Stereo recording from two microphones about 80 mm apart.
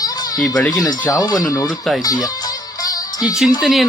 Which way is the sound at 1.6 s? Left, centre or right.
Centre.